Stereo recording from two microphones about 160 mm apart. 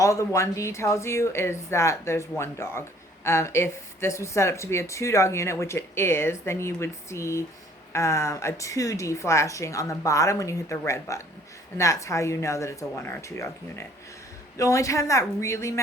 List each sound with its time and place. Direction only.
0.0 s speech: 20° left (ahead or behind)